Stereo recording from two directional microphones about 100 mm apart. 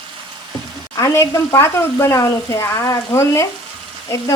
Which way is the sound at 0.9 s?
30° left (ahead or behind).